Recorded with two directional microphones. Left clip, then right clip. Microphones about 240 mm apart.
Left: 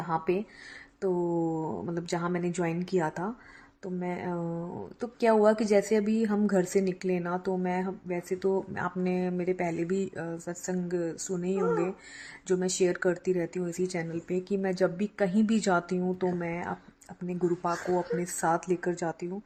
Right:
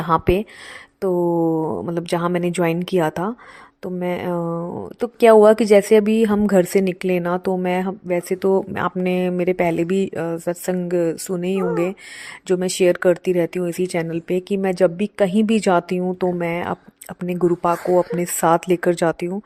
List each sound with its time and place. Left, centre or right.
0.1 s a woman's voice: right